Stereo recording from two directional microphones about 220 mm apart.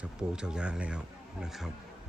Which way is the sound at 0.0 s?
5° right (ahead or behind).